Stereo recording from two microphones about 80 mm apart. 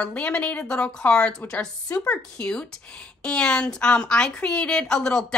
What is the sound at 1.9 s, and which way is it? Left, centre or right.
Speech, left.